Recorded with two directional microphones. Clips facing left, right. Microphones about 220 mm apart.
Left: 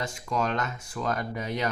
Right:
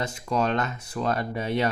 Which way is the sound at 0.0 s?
35° right (ahead or behind).